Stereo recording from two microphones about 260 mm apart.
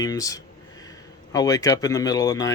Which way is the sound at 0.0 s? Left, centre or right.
Centre.